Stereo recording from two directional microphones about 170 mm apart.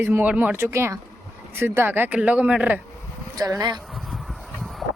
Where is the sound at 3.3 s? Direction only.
20° right (ahead or behind).